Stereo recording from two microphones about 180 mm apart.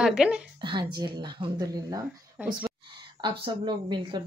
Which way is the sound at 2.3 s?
5° right (ahead or behind).